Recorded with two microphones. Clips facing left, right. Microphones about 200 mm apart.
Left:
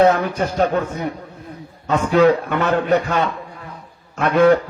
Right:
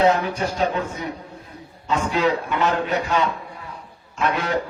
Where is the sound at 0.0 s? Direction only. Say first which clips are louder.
Left 4 dB; 55° left (ahead or behind).